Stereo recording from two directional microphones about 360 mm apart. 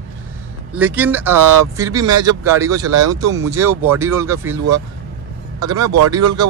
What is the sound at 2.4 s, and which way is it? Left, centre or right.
Speech, centre.